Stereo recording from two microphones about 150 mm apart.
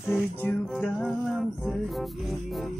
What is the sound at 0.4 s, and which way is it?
Music, 10° left (ahead or behind).